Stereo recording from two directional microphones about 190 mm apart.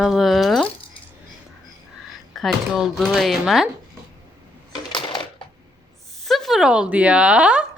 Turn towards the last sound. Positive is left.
turn(degrees=-5)  # may be behind; listen again after turning